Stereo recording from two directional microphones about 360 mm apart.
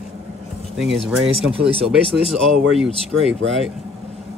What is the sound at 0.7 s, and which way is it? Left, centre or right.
Speech, centre.